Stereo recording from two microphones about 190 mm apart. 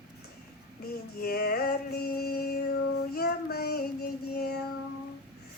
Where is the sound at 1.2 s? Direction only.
55° left (ahead or behind).